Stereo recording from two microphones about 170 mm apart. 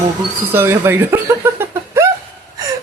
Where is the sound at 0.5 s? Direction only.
15° right (ahead or behind).